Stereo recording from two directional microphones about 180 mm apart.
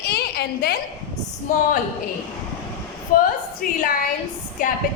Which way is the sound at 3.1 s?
50° left (ahead or behind).